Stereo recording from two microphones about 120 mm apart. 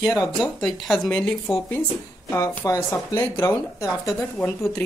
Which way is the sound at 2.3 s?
25° left (ahead or behind).